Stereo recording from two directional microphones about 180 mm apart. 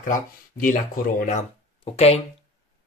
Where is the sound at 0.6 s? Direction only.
50° left (ahead or behind).